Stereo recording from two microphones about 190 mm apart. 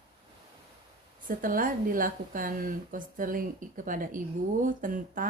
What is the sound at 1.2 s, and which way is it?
A woman's voice, 45° right (ahead or behind).